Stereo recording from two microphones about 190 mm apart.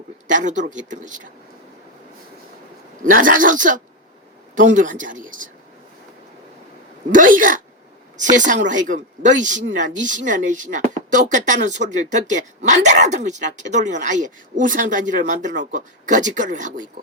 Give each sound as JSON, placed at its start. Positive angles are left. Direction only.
{"t": 0.3, "sound": "speech", "side_deg": -40}
{"t": 3.0, "sound": "speech", "side_deg": -45}
{"t": 7.1, "sound": "speech", "side_deg": -45}